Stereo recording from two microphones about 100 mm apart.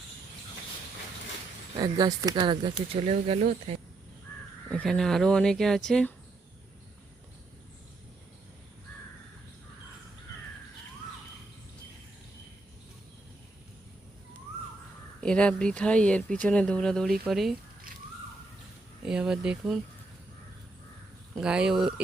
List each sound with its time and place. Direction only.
1.8 s speech: 40° right (ahead or behind)
3.1 s speech: 90° right
4.7 s speech: 5° left (ahead or behind)
15.2 s speech: 10° left (ahead or behind)
19.0 s speech: 5° right (ahead or behind)
21.4 s speech: 10° right (ahead or behind)